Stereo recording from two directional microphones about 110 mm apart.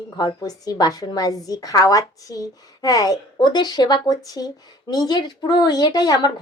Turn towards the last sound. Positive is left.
turn(degrees=35)  # may be behind; listen again after turning